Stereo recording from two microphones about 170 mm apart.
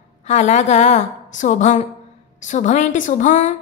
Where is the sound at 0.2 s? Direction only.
45° left (ahead or behind).